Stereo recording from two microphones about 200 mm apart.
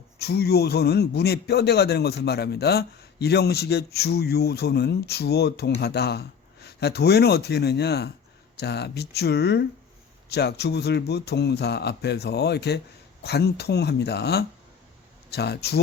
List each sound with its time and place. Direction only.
0.2 s a man's voice: 55° left (ahead or behind)